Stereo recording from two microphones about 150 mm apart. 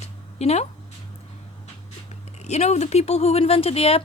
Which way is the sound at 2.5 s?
45° left (ahead or behind).